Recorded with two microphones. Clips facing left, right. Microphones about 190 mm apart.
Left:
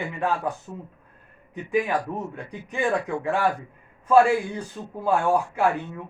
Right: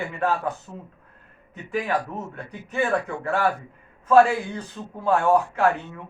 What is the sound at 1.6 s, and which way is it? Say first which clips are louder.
A man's voice: left 2 dB; 15° left (ahead or behind).